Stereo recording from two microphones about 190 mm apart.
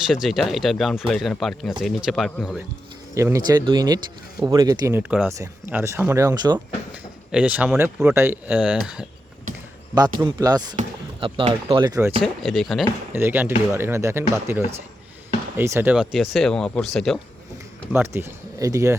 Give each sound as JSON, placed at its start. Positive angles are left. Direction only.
{"t": 0.1, "sound": "speech", "side_deg": 0}
{"t": 3.2, "sound": "speech", "side_deg": -15}
{"t": 6.9, "sound": "speech", "side_deg": -5}
{"t": 10.2, "sound": "speech", "side_deg": -20}
{"t": 12.2, "sound": "speech", "side_deg": 0}
{"t": 13.1, "sound": "speech", "side_deg": -10}
{"t": 17.9, "sound": "speech", "side_deg": -15}